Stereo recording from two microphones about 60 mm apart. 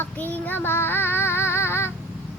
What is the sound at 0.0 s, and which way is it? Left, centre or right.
Child singing, left.